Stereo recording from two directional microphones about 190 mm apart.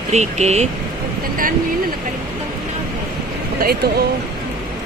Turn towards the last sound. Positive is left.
turn(degrees=-55)  # may be behind; listen again after turning